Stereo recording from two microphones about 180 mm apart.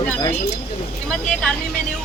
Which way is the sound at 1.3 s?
5° left (ahead or behind).